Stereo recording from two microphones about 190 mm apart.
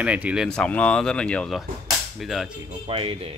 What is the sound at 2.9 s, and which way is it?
Speech, 30° right (ahead or behind).